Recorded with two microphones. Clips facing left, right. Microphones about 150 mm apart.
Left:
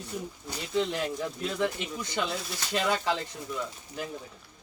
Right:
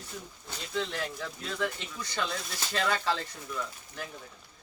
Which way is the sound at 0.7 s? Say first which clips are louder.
Left 5 dB; 15° left (ahead or behind).